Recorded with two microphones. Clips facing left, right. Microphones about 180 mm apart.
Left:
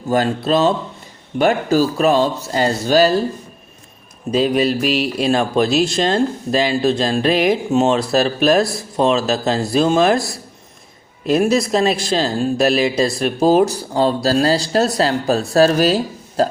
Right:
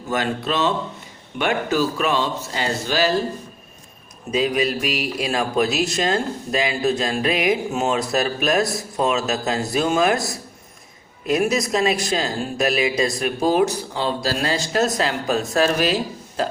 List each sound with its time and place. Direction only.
0.1 s a man's voice: 35° left (ahead or behind)
4.3 s a man's voice: 35° left (ahead or behind)
11.3 s a man's voice: 30° left (ahead or behind)